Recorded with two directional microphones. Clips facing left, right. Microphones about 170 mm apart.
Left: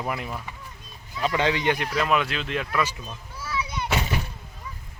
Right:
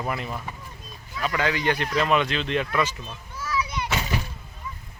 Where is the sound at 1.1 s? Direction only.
25° left (ahead or behind).